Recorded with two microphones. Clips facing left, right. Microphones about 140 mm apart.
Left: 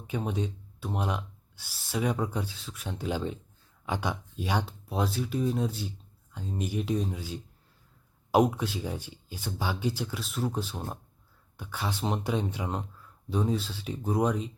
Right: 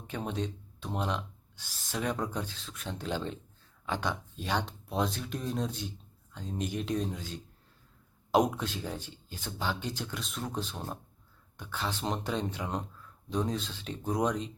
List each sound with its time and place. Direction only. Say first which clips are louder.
0.1 s speech: left 3 dB; 10° left (ahead or behind)